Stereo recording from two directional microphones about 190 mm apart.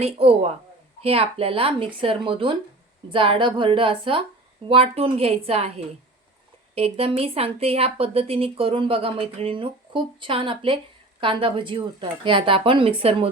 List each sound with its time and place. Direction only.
0.0 s a woman's voice: 30° right (ahead or behind)